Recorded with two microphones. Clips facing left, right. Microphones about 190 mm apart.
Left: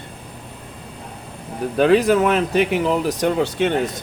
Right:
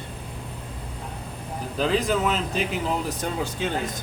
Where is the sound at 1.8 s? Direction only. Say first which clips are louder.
Left 8 dB; 65° left (ahead or behind).